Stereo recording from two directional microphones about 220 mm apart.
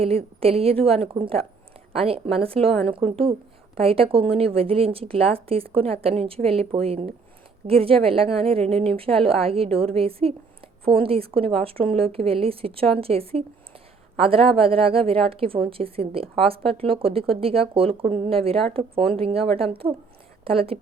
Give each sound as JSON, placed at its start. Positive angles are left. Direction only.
{"t": 0.0, "sound": "speech", "side_deg": -25}